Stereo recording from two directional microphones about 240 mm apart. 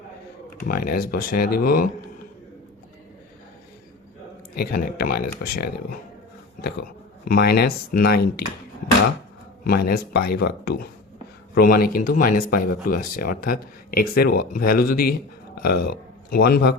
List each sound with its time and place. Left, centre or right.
0.6 s speech: left
4.5 s speech: left
9.6 s speech: left